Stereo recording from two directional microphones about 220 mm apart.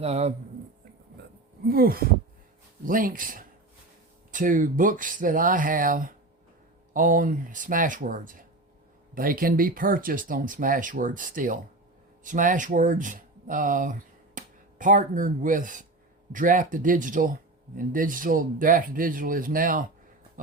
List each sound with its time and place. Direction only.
0.0 s speech: 30° right (ahead or behind)
1.6 s speech: 45° right (ahead or behind)